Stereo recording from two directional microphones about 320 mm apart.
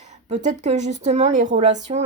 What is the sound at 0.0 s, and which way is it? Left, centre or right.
Speech, right.